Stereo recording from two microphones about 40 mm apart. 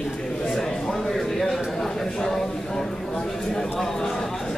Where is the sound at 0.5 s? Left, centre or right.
Centre.